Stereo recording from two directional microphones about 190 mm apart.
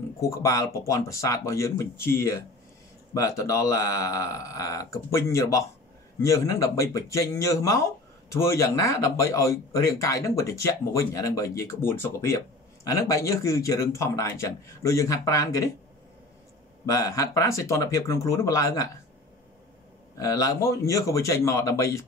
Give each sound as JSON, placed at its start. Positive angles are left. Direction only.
{"t": 0.2, "sound": "speech", "side_deg": 15}
{"t": 16.8, "sound": "speech", "side_deg": 15}
{"t": 20.2, "sound": "speech", "side_deg": 15}